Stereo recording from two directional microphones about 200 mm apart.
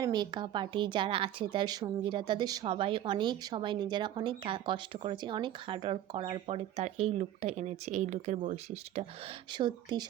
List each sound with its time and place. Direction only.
0.0 s speech: 20° right (ahead or behind)
9.5 s speech: 25° right (ahead or behind)